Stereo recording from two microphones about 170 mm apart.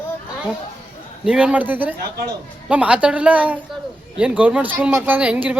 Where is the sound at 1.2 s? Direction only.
5° right (ahead or behind).